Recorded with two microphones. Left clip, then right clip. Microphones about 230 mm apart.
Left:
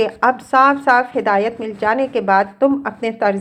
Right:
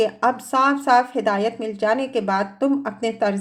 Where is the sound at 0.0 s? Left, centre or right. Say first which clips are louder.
Left 4 dB; centre.